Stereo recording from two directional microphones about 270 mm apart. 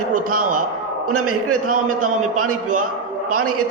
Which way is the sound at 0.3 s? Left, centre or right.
Right.